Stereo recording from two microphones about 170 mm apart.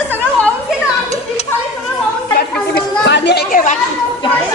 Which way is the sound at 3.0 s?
90° left.